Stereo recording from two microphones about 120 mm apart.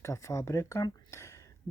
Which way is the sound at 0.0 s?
25° left (ahead or behind).